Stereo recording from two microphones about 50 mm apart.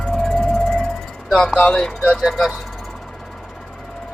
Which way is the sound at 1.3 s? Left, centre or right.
Centre.